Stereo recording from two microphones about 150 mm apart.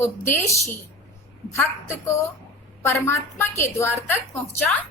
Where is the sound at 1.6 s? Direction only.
20° left (ahead or behind).